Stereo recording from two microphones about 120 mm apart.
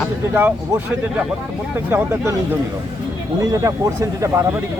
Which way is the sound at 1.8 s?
20° right (ahead or behind).